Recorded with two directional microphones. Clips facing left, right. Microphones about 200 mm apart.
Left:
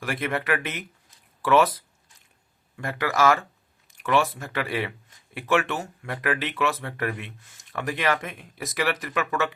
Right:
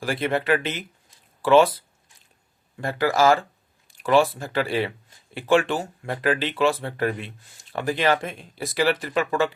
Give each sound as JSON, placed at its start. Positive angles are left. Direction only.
{"t": 0.0, "sound": "speech", "side_deg": -30}